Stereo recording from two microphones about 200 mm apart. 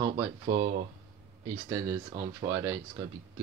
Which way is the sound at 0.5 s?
50° right (ahead or behind).